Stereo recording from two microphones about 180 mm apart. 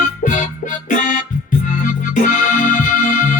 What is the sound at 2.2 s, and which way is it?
Music, 45° left (ahead or behind).